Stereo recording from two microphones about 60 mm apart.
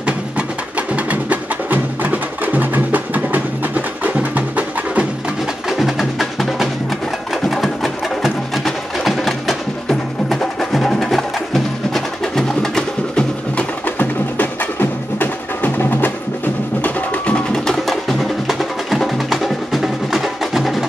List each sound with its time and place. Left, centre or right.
0.0 s music: right
5.7 s wood block: centre
7.4 s music: centre
13.8 s music: left
17.5 s music: centre